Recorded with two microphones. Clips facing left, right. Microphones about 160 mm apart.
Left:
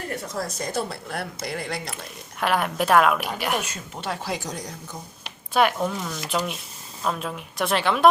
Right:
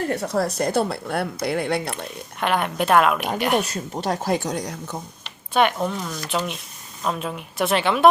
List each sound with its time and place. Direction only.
0.2 s speech: 65° right (ahead or behind)
2.4 s a woman's voice: centre (ahead or behind)
3.6 s speech: 40° right (ahead or behind)
4.4 s speech: 65° right (ahead or behind)
5.2 s a woman's voice: 5° left (ahead or behind)